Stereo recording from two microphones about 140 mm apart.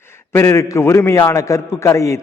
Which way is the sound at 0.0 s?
20° left (ahead or behind).